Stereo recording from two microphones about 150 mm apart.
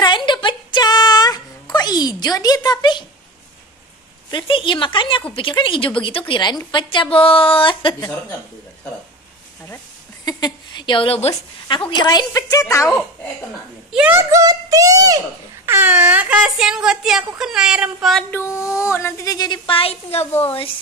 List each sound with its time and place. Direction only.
0.0 s a sound: 30° left (ahead or behind)
4.3 s a woman's voice: 35° left (ahead or behind)
10.2 s a woman's voice: 30° left (ahead or behind)
12.0 s a woman's voice: 30° left (ahead or behind)
13.9 s speech: 10° right (ahead or behind)
14.3 s speech: 25° right (ahead or behind); by 17.3 s centre (ahead or behind)
17.4 s a sound: 5° right (ahead or behind)
18.3 s a woman's voice: 20° left (ahead or behind); by 20.2 s 40° left (ahead or behind)
20.2 s a woman's voice: 15° left (ahead or behind)